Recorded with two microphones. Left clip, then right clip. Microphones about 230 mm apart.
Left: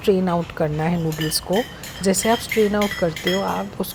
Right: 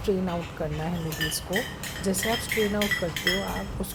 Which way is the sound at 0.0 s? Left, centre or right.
Left.